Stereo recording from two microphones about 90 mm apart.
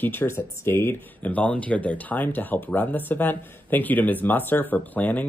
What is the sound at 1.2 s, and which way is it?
Speech, 15° left (ahead or behind).